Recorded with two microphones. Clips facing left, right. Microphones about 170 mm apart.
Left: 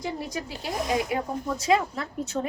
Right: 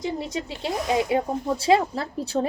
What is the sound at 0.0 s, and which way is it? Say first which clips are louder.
A woman's voice: right 3 dB; 25° right (ahead or behind).